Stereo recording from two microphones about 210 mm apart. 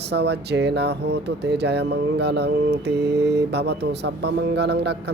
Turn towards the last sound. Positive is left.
turn(degrees=-55)  # may be behind; listen again after turning